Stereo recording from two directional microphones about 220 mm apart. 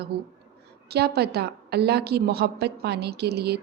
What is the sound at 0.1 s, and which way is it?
A woman's voice, 45° right (ahead or behind).